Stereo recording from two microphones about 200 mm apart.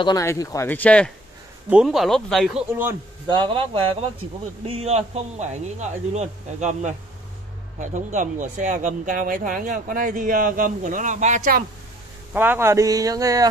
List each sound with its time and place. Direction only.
0.0 s speech: 15° left (ahead or behind); by 2.6 s centre (ahead or behind)
3.3 s speech: 25° right (ahead or behind); by 11.6 s 40° right (ahead or behind)
12.4 s speech: 10° right (ahead or behind)